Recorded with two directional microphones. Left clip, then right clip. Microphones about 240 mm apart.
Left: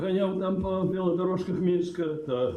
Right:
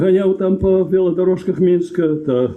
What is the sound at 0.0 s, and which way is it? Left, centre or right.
Speech, right.